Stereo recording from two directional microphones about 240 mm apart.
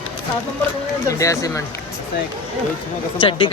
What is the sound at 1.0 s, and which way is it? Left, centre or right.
Speech, centre.